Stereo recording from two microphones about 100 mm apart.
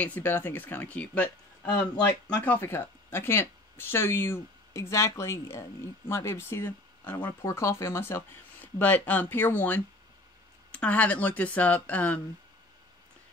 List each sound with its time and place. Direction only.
0.0 s speech: 20° left (ahead or behind)
2.4 s speech: 20° left (ahead or behind)
8.7 s speech: 15° left (ahead or behind)